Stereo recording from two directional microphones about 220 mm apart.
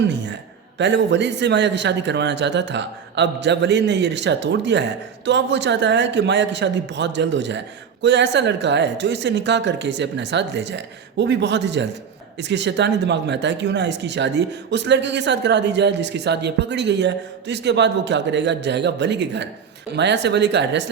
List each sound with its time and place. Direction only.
0.8 s speech: 55° right (ahead or behind)